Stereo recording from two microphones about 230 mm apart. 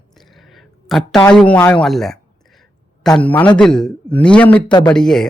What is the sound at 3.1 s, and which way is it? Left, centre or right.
A man's voice, centre.